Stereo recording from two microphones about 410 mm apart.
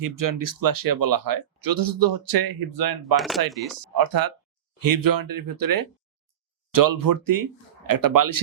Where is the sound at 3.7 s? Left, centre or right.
Right.